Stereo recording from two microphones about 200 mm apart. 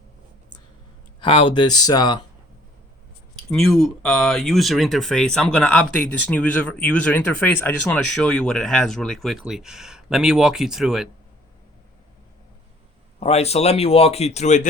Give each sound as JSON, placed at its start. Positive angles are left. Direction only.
{"t": 1.5, "sound": "speech", "side_deg": 20}
{"t": 3.5, "sound": "speech", "side_deg": 0}
{"t": 13.1, "sound": "speech", "side_deg": 30}